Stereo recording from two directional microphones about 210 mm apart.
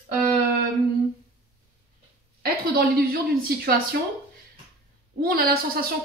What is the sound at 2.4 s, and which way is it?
Speech, 45° right (ahead or behind).